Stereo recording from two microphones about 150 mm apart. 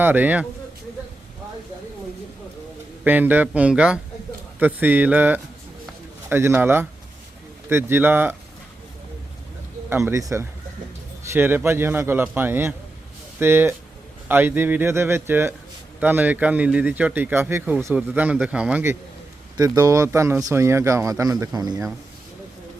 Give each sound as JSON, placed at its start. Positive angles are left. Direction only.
{"t": 0.0, "sound": "speech", "side_deg": -10}
{"t": 3.0, "sound": "speech", "side_deg": -10}
{"t": 9.9, "sound": "speech", "side_deg": -20}
{"t": 19.5, "sound": "speech", "side_deg": -25}